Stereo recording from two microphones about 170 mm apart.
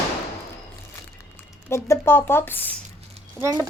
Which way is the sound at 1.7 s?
15° left (ahead or behind).